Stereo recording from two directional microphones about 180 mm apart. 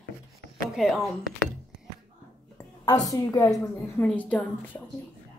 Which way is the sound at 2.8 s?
20° left (ahead or behind).